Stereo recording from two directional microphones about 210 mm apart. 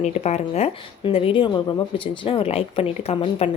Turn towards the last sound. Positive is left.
turn(degrees=30)  # may be behind; listen again after turning